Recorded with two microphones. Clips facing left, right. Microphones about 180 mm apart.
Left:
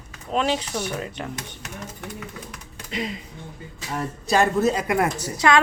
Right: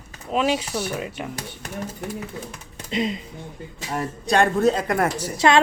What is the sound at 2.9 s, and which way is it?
Speech, 25° right (ahead or behind).